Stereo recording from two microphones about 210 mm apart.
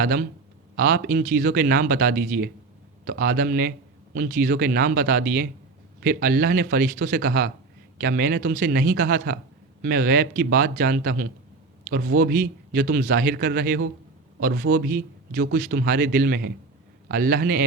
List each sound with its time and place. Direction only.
0.0 s a man's voice: 45° right (ahead or behind)